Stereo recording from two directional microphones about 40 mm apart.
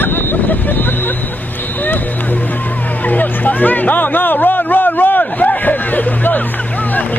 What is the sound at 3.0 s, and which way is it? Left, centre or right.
Speech, left.